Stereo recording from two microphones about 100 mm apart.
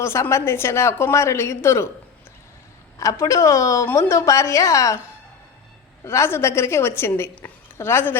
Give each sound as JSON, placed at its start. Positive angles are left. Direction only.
{"t": 0.0, "sound": "a woman's voice", "side_deg": 30}
{"t": 3.0, "sound": "a woman's voice", "side_deg": 30}
{"t": 6.1, "sound": "a woman's voice", "side_deg": 25}